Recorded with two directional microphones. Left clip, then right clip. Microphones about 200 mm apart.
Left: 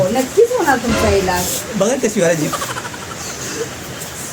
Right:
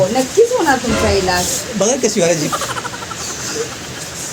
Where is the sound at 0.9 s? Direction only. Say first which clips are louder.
Even; centre (ahead or behind).